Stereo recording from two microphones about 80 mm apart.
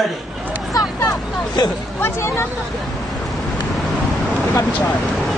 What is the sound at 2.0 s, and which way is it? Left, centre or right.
Speech, left.